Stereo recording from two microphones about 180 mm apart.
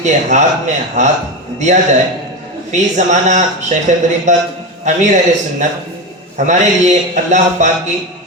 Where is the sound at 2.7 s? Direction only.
40° right (ahead or behind).